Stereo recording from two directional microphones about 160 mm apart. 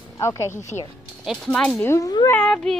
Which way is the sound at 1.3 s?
5° left (ahead or behind).